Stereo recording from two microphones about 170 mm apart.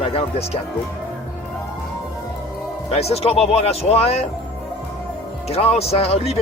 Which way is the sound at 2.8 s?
35° left (ahead or behind).